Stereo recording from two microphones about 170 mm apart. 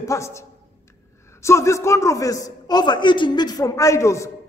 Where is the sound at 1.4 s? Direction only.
15° left (ahead or behind).